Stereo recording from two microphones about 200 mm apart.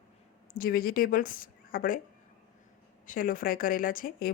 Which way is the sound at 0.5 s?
45° left (ahead or behind).